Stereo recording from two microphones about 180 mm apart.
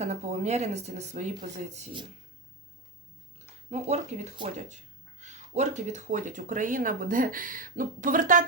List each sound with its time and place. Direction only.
0.0 s speech: 40° right (ahead or behind)
3.7 s speech: 40° right (ahead or behind)